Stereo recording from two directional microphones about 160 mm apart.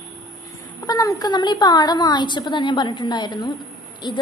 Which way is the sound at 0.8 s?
25° left (ahead or behind).